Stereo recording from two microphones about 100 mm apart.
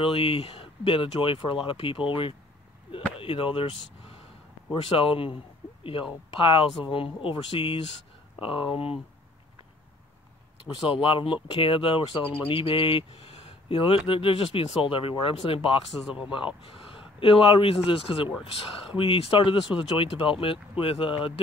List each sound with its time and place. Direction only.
0.0 s speech: 65° left (ahead or behind)
2.9 s a sound: 65° left (ahead or behind)
4.9 s speech: 60° left (ahead or behind)
10.9 s speech: 60° left (ahead or behind)